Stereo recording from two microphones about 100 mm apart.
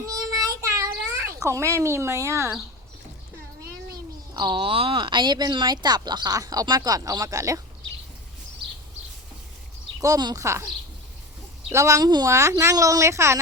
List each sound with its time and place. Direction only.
0.0 s a sound: 35° right (ahead or behind)
3.9 s a child's voice: 50° right (ahead or behind); by 7.6 s 30° right (ahead or behind)
10.0 s speech: 35° right (ahead or behind)
11.7 s speech: 30° right (ahead or behind)
12.3 s speech: 30° right (ahead or behind)